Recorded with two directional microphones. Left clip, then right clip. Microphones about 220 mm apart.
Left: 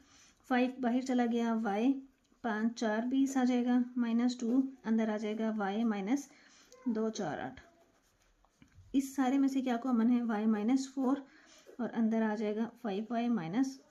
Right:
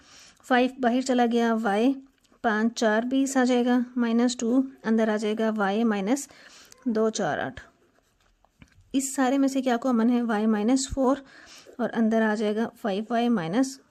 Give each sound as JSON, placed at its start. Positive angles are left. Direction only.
{"t": 0.1, "sound": "a woman's voice", "side_deg": -50}
{"t": 8.9, "sound": "speech", "side_deg": -50}